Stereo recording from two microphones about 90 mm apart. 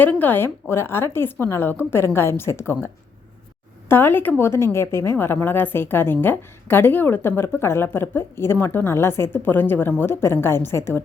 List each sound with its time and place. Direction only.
0.0 s a woman's voice: 20° left (ahead or behind)